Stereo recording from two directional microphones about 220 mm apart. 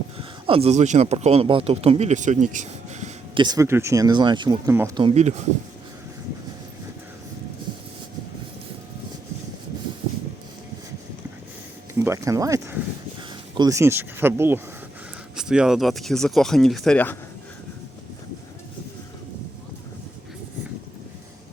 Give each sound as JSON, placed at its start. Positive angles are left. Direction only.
{"t": 0.2, "sound": "speech", "side_deg": -25}
{"t": 3.4, "sound": "speech", "side_deg": -15}
{"t": 5.0, "sound": "speech", "side_deg": -30}
{"t": 11.9, "sound": "speech", "side_deg": -15}